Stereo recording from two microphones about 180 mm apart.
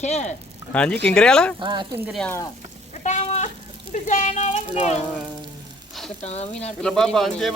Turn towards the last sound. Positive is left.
turn(degrees=0)  # may be behind; listen again after turning